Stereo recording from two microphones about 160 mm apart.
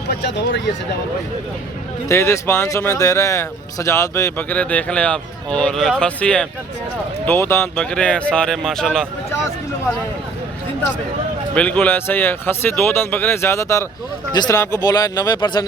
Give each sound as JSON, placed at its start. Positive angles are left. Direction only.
{"t": 0.1, "sound": "speech", "side_deg": 90}
{"t": 2.0, "sound": "speech", "side_deg": 20}
{"t": 11.5, "sound": "a man's voice", "side_deg": 10}